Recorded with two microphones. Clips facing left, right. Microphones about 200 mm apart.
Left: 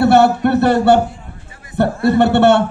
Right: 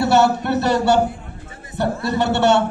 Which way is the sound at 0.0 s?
55° left (ahead or behind).